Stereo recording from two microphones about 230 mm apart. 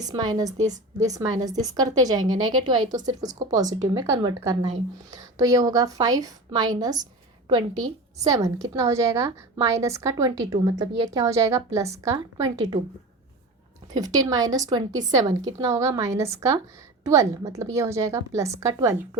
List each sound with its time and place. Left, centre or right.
0.0 s a woman's voice: centre
13.9 s a woman's voice: centre